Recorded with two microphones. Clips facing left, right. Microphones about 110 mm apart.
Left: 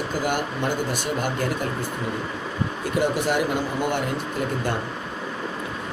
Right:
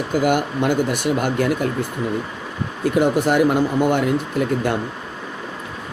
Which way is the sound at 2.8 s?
50° right (ahead or behind).